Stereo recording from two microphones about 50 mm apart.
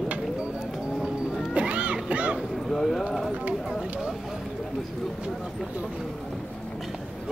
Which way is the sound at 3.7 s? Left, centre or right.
Centre.